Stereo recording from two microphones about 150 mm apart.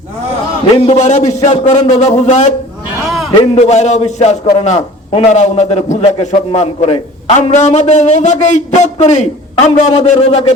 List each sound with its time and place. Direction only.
0.6 s a man's voice: 45° left (ahead or behind)